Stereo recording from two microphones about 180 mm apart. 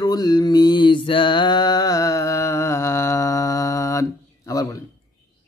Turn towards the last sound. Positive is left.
turn(degrees=20)  # may be behind; listen again after turning